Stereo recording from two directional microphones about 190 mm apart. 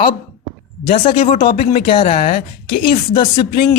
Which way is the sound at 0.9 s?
30° left (ahead or behind).